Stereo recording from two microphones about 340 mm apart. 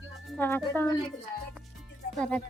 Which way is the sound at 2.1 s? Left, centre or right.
Centre.